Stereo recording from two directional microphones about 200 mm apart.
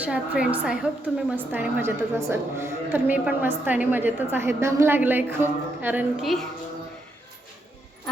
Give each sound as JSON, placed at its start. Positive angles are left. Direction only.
{"t": 0.0, "sound": "a woman's voice", "side_deg": -5}